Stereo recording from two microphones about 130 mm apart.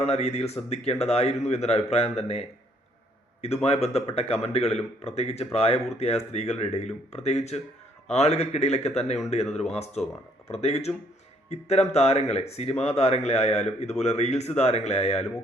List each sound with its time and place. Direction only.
0.0 s speech: 55° left (ahead or behind)
3.4 s speech: 55° left (ahead or behind)